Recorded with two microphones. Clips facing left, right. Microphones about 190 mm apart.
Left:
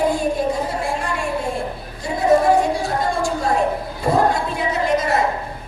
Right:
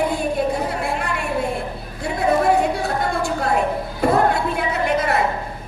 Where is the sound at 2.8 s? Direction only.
60° right (ahead or behind).